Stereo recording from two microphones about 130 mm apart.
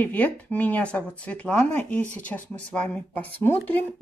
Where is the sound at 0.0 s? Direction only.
15° left (ahead or behind).